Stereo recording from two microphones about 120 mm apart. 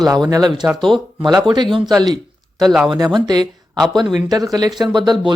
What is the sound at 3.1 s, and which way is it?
Speech, 35° right (ahead or behind).